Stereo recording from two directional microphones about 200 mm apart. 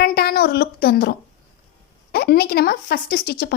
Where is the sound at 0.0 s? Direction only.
50° left (ahead or behind).